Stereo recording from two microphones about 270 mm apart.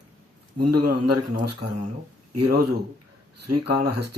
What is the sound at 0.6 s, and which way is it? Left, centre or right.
Speech, right.